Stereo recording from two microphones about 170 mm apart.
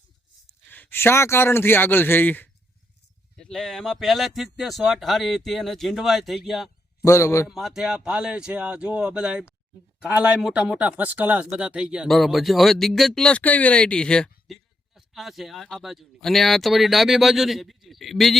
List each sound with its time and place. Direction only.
0.7 s speech: 10° left (ahead or behind)
7.0 s speech: 15° left (ahead or behind)
7.4 s speech: centre (ahead or behind)